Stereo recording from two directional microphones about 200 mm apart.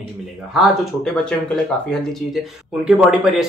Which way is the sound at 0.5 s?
Centre (ahead or behind).